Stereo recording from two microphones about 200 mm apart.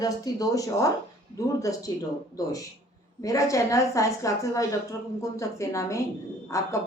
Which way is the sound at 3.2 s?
15° left (ahead or behind).